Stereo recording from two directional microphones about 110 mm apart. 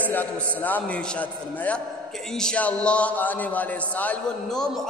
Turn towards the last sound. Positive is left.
turn(degrees=5)  # may be behind; listen again after turning